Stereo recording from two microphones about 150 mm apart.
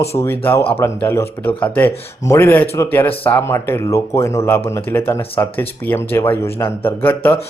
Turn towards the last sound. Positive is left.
turn(degrees=15)  # may be behind; listen again after turning